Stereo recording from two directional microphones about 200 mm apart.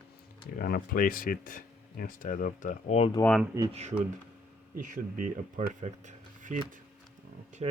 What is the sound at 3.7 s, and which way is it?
Speech, 30° right (ahead or behind).